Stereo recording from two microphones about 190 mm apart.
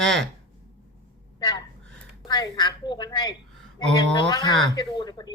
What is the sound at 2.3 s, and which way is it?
Speech, 20° left (ahead or behind).